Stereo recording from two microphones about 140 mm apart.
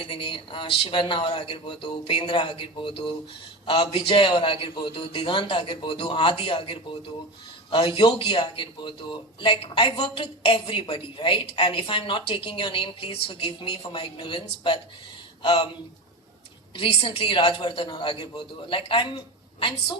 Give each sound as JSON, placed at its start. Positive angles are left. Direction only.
{"t": 0.0, "sound": "speech", "side_deg": 35}
{"t": 16.7, "sound": "a woman's voice", "side_deg": 40}